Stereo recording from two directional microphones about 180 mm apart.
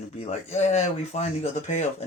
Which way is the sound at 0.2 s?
35° left (ahead or behind).